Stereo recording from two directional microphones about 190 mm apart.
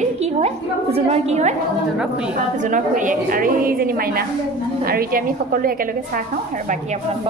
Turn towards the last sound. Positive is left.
turn(degrees=-50)  # may be behind; listen again after turning